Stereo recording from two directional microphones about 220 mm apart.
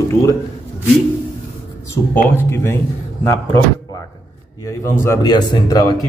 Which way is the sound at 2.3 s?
10° left (ahead or behind).